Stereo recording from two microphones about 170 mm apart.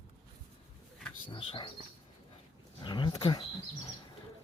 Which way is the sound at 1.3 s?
30° left (ahead or behind).